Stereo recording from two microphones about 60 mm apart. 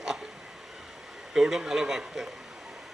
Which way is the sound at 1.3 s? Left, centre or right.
Centre.